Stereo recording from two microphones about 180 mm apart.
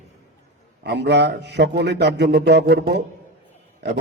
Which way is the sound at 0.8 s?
70° right (ahead or behind).